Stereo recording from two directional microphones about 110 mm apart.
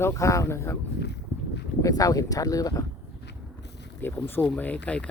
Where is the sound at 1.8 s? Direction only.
35° left (ahead or behind).